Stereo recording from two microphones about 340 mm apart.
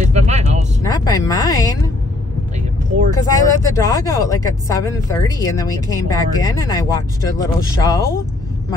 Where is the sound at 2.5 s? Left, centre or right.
Right.